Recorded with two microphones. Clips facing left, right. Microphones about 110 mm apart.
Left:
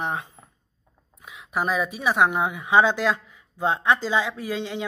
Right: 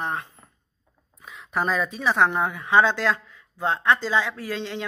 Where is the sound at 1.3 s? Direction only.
5° left (ahead or behind).